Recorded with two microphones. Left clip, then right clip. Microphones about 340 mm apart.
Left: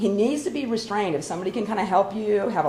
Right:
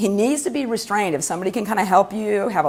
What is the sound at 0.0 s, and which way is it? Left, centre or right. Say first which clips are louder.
A woman's voice: right 3 dB; right.